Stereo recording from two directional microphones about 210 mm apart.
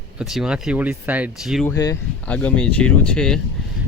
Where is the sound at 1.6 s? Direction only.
15° left (ahead or behind).